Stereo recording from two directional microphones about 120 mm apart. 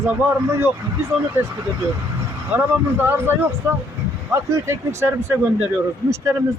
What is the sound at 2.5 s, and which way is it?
Speech, 15° right (ahead or behind).